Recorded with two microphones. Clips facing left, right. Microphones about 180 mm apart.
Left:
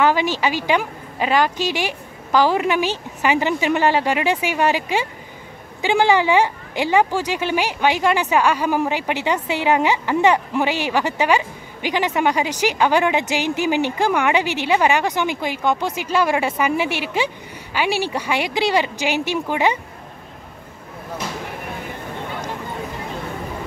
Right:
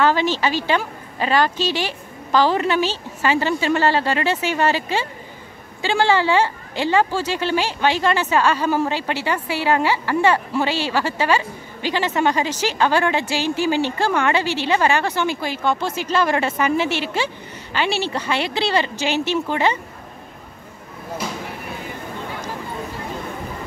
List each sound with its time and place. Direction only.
0.0 s speech: 15° left (ahead or behind)